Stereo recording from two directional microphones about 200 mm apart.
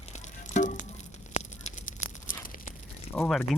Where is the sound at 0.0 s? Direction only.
35° left (ahead or behind).